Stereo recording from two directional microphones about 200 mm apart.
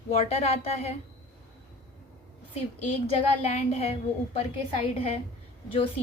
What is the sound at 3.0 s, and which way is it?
A woman's voice, 30° left (ahead or behind).